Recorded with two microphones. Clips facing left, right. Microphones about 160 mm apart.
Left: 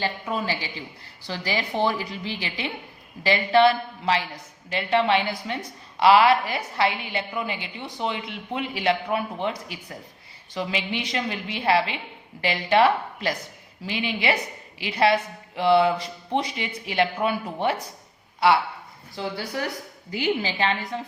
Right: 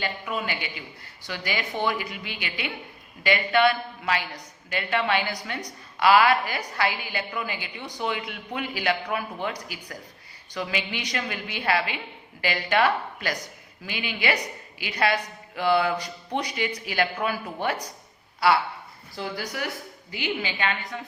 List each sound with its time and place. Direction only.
0.0 s a woman's voice: 35° left (ahead or behind)
19.1 s a woman's voice: 20° left (ahead or behind)
19.5 s a woman's voice: 35° left (ahead or behind)